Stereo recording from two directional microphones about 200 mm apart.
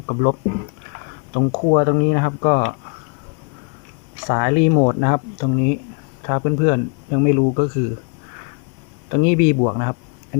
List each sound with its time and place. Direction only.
0.1 s speech: 40° left (ahead or behind)
1.4 s speech: 45° left (ahead or behind)
4.3 s speech: 45° left (ahead or behind)
9.1 s speech: 45° left (ahead or behind)